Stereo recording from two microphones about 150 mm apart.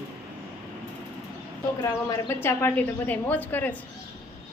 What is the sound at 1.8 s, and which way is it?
A woman's voice, 20° left (ahead or behind).